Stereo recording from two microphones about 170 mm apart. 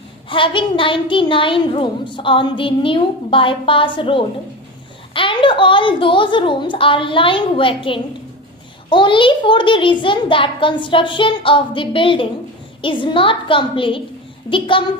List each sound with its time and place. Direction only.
0.3 s a woman's voice: 30° left (ahead or behind)